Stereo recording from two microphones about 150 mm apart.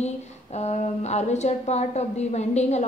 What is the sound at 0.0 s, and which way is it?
A woman's voice, 45° left (ahead or behind).